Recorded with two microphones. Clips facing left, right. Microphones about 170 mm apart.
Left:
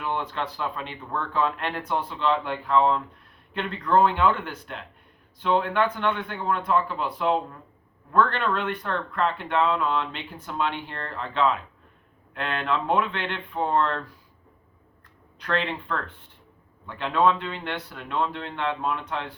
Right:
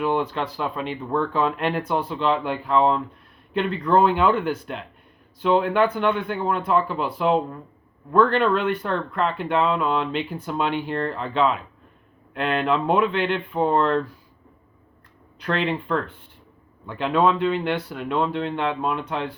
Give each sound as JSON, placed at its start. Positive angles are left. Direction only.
{"t": 0.0, "sound": "speech", "side_deg": -10}
{"t": 15.5, "sound": "speech", "side_deg": -10}